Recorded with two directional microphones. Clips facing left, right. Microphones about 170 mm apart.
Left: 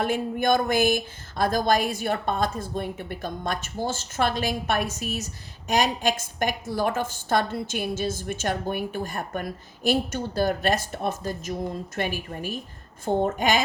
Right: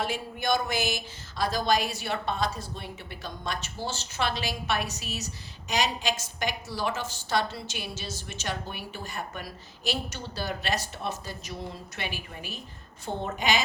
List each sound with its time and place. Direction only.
0.0 s speech: 50° left (ahead or behind)